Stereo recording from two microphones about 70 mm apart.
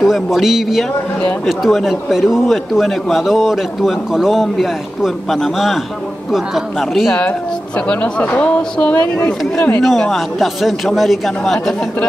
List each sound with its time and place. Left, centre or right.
0.0 s a man's voice: centre
7.2 s a woman's voice: centre
9.8 s a man's voice: centre